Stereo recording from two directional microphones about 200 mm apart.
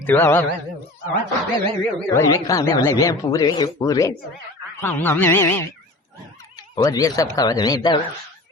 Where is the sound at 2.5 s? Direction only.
20° left (ahead or behind).